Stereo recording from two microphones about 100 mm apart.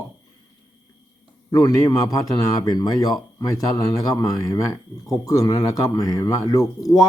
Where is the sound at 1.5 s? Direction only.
35° left (ahead or behind).